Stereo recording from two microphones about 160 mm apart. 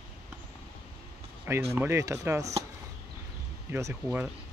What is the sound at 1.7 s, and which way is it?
Speech, 15° right (ahead or behind).